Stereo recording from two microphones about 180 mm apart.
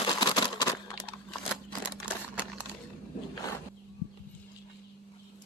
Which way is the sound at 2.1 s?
5° right (ahead or behind).